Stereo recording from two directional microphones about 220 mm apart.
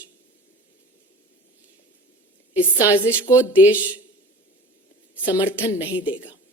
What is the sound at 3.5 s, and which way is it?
Speech, 5° right (ahead or behind).